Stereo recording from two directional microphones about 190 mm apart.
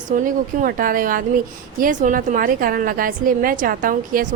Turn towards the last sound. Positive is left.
turn(degrees=-45)  # may be behind; listen again after turning